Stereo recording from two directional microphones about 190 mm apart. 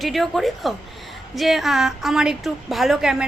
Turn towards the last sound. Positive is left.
turn(degrees=0)  # may be behind; listen again after turning